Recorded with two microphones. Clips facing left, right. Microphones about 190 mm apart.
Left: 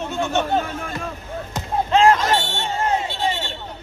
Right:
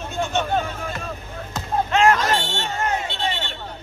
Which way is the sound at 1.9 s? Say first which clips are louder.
Left 3 dB; 30° left (ahead or behind).